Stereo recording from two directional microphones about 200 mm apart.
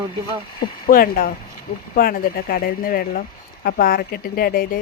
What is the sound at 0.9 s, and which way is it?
Speech, 45° left (ahead or behind).